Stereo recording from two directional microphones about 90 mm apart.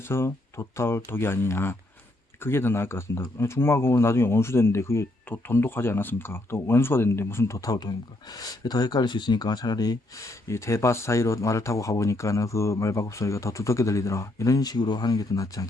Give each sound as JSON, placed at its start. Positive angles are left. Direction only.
{"t": 0.1, "sound": "speech", "side_deg": 30}